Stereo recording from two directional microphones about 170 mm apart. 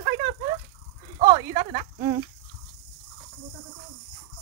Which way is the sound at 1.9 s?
20° right (ahead or behind).